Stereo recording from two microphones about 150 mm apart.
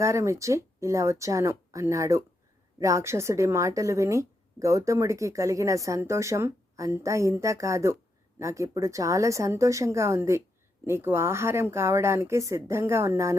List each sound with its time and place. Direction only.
0.0 s speech: 20° right (ahead or behind)